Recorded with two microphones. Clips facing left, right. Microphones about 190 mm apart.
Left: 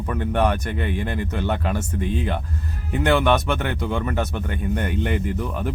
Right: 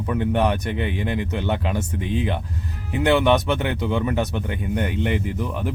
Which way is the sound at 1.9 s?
45° left (ahead or behind).